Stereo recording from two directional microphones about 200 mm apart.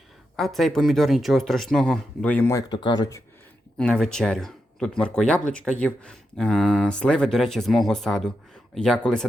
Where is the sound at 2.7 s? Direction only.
25° left (ahead or behind).